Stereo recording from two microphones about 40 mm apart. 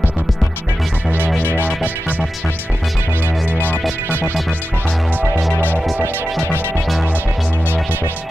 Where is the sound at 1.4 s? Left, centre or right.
Left.